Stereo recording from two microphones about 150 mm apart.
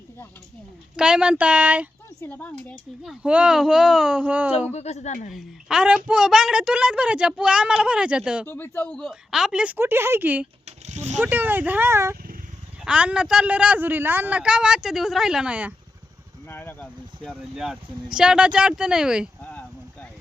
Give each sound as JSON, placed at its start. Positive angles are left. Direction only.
{"t": 0.9, "sound": "a man's voice", "side_deg": -5}
{"t": 2.2, "sound": "speech", "side_deg": 10}
{"t": 3.0, "sound": "a woman's voice", "side_deg": -5}
{"t": 4.7, "sound": "speech", "side_deg": 45}
{"t": 5.3, "sound": "a woman's voice", "side_deg": 0}
{"t": 8.4, "sound": "a woman's voice", "side_deg": 15}
{"t": 10.7, "sound": "a sound", "side_deg": -45}
{"t": 11.2, "sound": "a man's voice", "side_deg": -10}
{"t": 16.5, "sound": "speech", "side_deg": 15}
{"t": 17.2, "sound": "a woman's voice", "side_deg": -5}
{"t": 19.4, "sound": "a sound", "side_deg": 10}